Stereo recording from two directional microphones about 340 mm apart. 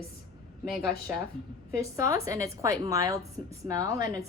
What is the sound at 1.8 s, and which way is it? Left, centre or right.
A woman's voice, centre.